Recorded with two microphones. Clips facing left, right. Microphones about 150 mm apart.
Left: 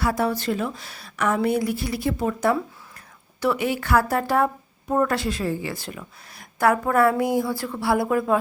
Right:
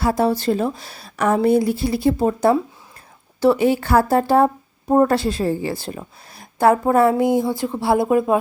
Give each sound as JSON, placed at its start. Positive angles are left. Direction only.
{"t": 0.0, "sound": "a woman's voice", "side_deg": -30}